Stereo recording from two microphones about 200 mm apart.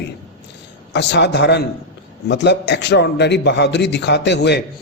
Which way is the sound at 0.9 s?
60° left (ahead or behind).